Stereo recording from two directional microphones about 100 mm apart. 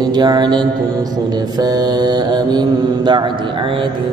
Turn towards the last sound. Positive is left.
turn(degrees=-45)  # may be behind; listen again after turning